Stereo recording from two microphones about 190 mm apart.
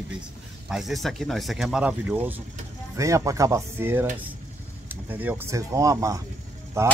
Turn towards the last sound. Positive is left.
turn(degrees=-15)  # may be behind; listen again after turning